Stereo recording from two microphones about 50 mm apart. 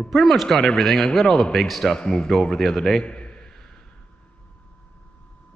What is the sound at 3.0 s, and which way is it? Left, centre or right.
Speech, left.